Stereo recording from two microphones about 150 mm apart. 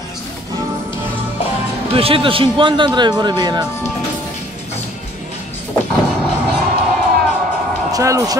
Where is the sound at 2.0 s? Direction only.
40° right (ahead or behind).